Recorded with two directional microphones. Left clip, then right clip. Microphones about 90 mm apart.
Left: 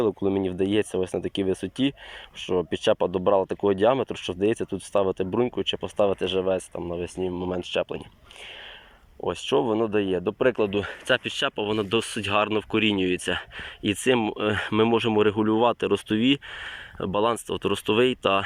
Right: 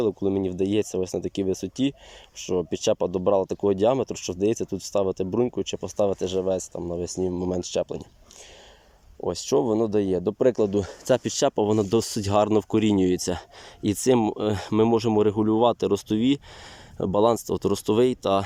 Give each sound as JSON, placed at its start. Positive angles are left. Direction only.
{"t": 0.0, "sound": "speech", "side_deg": -30}
{"t": 7.2, "sound": "speech", "side_deg": -45}
{"t": 9.2, "sound": "speech", "side_deg": -35}
{"t": 10.8, "sound": "speech", "side_deg": -55}
{"t": 17.0, "sound": "speech", "side_deg": -60}
{"t": 17.5, "sound": "speech", "side_deg": -45}